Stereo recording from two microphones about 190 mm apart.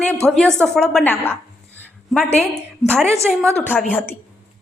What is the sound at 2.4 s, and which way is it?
A woman's voice, 5° left (ahead or behind).